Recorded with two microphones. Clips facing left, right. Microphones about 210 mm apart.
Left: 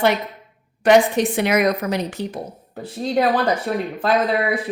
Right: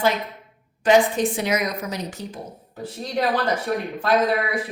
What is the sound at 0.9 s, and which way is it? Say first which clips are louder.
Speech: left 3 dB; 65° left (ahead or behind).